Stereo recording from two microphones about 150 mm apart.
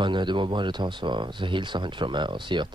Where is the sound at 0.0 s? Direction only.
30° right (ahead or behind).